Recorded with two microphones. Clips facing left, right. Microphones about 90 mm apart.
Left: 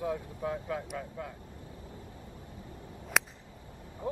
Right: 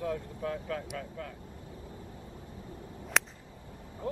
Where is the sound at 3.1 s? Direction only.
5° left (ahead or behind).